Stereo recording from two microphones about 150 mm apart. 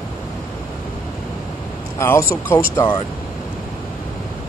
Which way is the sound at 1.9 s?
20° left (ahead or behind).